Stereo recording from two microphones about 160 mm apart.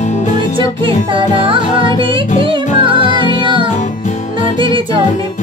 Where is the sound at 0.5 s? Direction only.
30° right (ahead or behind).